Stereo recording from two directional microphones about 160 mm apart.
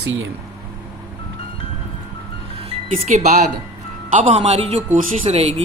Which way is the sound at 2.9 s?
45° right (ahead or behind).